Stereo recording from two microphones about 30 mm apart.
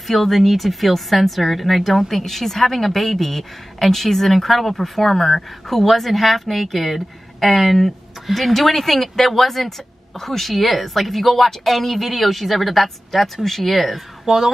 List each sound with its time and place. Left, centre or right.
0.0 s a woman's voice: centre
14.2 s speech: centre